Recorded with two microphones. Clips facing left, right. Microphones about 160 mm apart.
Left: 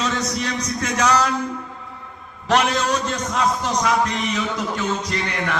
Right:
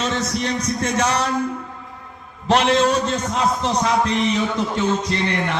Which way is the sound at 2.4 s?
30° right (ahead or behind).